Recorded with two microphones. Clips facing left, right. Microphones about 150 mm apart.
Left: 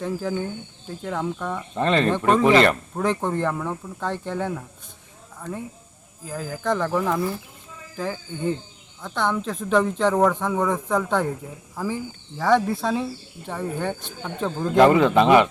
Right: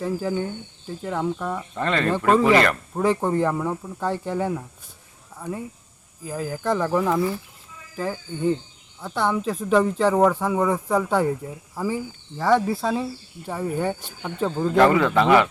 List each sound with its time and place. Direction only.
0.0 s speech: 5° right (ahead or behind)
1.7 s a man's voice: 20° left (ahead or behind)
2.9 s speech: 10° right (ahead or behind)
14.8 s a man's voice: 20° left (ahead or behind)